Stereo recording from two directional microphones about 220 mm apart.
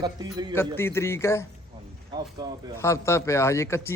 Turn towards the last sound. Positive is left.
turn(degrees=10)  # may be behind; listen again after turning